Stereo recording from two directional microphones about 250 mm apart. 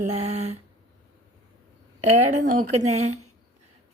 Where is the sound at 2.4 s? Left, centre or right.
Right.